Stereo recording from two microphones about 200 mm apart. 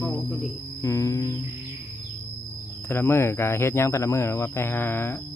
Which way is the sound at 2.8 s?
10° left (ahead or behind).